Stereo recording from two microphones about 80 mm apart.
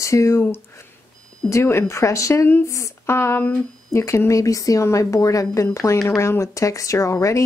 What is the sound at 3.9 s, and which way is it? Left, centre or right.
Speech, left.